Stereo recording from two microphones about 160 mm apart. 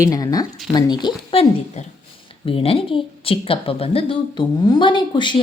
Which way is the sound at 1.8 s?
45° left (ahead or behind).